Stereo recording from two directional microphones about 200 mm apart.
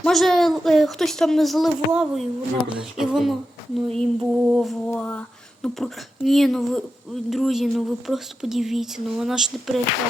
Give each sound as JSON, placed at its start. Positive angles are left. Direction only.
{"t": 0.0, "sound": "speech", "side_deg": 0}